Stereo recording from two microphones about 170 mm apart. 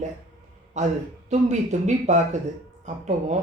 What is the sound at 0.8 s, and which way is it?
A man's voice, 45° right (ahead or behind).